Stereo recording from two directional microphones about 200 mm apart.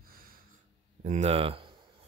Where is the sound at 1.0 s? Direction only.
35° right (ahead or behind).